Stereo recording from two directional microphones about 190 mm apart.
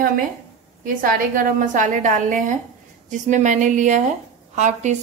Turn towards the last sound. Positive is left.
turn(degrees=-40)  # may be behind; listen again after turning